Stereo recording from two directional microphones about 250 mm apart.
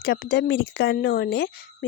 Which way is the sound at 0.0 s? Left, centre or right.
Left.